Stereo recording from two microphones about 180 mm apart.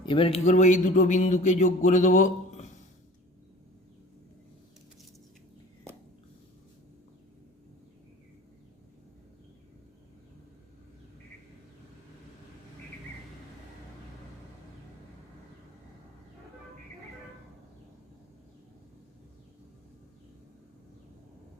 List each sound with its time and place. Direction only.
0.0 s speech: 30° left (ahead or behind)